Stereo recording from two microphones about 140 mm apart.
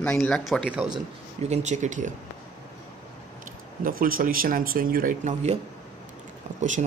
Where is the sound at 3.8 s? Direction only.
90° right.